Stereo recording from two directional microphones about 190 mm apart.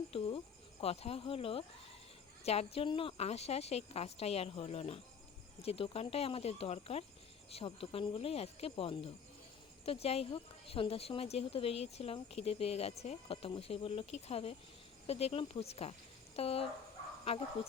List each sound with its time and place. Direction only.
0.1 s speech: 30° left (ahead or behind)